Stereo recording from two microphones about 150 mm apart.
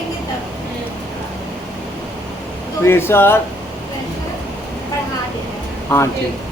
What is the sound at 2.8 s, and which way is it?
Speech, 15° left (ahead or behind).